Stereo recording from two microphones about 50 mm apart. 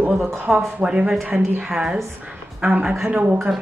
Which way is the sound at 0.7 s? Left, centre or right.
Right.